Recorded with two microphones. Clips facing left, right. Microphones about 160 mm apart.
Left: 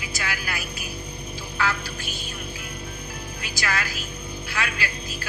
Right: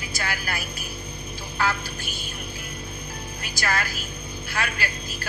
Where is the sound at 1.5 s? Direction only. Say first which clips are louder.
Right 1 dB; 45° right (ahead or behind).